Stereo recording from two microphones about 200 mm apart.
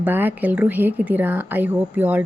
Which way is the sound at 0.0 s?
10° right (ahead or behind).